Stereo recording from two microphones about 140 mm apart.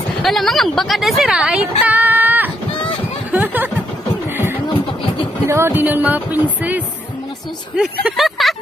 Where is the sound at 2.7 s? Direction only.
40° left (ahead or behind).